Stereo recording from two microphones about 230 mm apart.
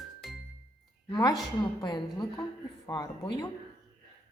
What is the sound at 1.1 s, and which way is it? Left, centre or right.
A woman's voice, centre.